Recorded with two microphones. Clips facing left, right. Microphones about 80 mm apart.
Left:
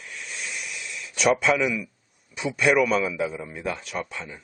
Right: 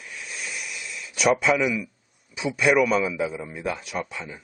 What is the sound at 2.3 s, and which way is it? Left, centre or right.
A man's voice, centre.